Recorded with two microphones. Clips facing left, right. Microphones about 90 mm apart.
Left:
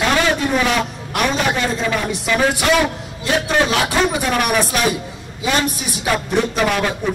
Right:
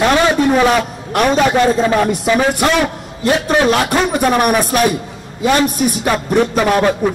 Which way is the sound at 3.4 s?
45° right (ahead or behind).